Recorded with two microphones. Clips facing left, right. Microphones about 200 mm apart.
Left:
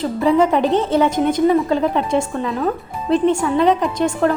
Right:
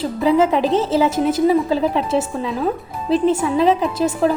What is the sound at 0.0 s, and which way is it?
A woman's voice, centre (ahead or behind).